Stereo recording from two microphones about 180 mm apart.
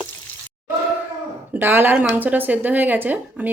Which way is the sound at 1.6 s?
10° right (ahead or behind).